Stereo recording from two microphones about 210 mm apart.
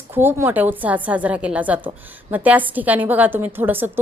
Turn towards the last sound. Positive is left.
turn(degrees=-10)  # may be behind; listen again after turning